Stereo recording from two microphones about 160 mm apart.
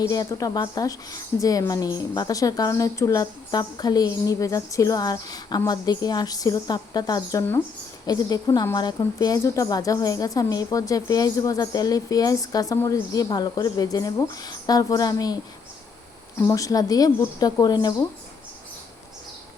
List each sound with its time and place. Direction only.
0.0 s a woman's voice: 20° left (ahead or behind)
16.4 s a woman's voice: 20° left (ahead or behind)